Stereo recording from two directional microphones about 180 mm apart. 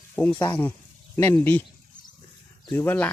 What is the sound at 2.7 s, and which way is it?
Speech, 10° left (ahead or behind).